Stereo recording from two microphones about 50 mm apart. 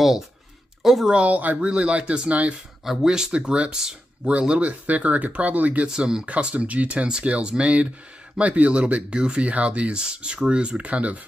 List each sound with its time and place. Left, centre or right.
0.8 s speech: centre
1.1 s speech: right
2.8 s speech: centre
4.3 s speech: right
5.9 s speech: centre
6.2 s speech: right